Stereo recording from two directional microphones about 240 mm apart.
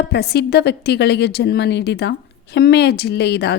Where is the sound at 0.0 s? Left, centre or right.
Left.